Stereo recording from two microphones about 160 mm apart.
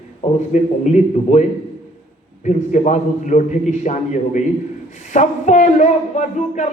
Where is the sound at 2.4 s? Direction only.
45° left (ahead or behind).